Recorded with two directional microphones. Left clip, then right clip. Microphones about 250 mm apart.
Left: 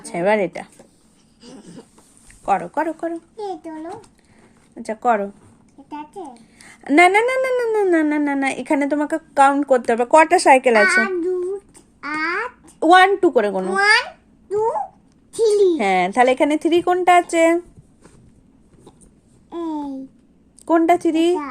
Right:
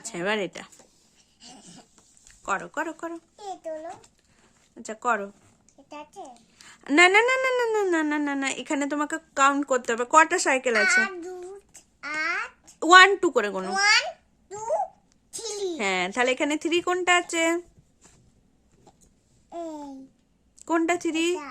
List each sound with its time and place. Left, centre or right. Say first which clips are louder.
0.0 s a child's voice: left 10 dB; centre
1.4 s a sound: left 7 dB; centre
2.2 s a child's voice: left 9 dB; centre
4.7 s a child's voice: left 8 dB; centre
10.8 s a child's voice: left 6 dB; centre
15.4 s a child's voice: left 15 dB; centre
19.5 s babbling: left 9 dB; centre
20.7 s a child's voice: left 9 dB; centre